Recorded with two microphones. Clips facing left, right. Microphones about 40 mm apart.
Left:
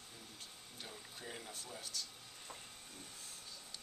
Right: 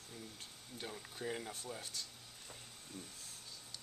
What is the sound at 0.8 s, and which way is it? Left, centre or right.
Speech, centre.